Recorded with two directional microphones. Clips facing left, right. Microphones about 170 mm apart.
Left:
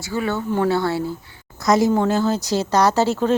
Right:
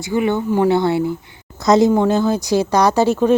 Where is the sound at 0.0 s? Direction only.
20° right (ahead or behind).